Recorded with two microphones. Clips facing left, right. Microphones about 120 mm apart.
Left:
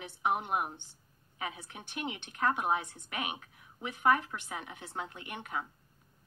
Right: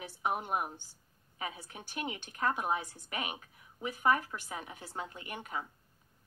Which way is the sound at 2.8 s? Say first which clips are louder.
Left 1 dB; 55° left (ahead or behind).